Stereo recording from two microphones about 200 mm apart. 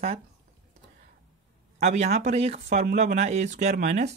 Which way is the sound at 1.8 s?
35° right (ahead or behind).